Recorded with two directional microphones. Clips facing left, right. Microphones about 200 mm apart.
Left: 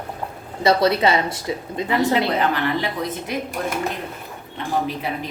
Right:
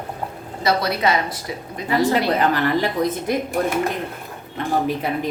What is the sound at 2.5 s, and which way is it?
Speech, 40° right (ahead or behind).